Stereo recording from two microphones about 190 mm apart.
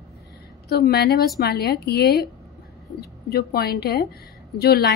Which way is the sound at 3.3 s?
55° left (ahead or behind).